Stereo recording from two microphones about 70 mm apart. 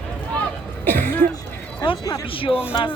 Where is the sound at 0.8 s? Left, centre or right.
Left.